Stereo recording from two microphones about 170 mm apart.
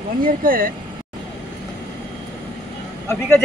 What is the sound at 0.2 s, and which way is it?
Speech, 55° right (ahead or behind).